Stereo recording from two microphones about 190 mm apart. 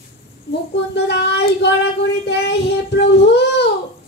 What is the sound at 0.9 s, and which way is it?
Speech, 60° left (ahead or behind).